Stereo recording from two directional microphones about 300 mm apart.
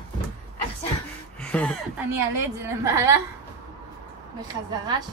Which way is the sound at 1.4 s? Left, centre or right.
Centre.